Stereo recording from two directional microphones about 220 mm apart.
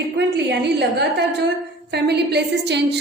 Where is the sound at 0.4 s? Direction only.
50° right (ahead or behind).